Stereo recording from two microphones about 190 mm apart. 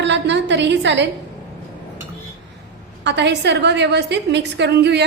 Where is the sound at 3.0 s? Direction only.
65° right (ahead or behind).